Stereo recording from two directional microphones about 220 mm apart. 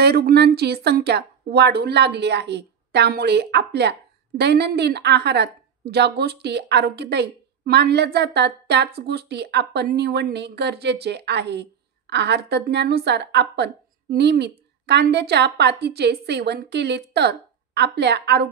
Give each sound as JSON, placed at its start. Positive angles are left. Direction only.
{"t": 0.0, "sound": "a woman's voice", "side_deg": -45}